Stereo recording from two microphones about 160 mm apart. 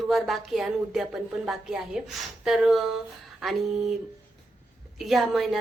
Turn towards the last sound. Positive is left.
turn(degrees=0)  # may be behind; listen again after turning